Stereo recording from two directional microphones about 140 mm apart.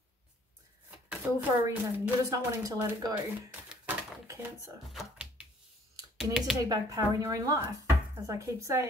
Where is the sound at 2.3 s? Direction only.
20° right (ahead or behind).